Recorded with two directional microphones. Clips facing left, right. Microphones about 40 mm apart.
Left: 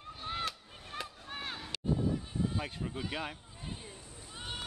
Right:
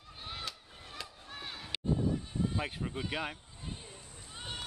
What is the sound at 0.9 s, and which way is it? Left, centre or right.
Chop, left.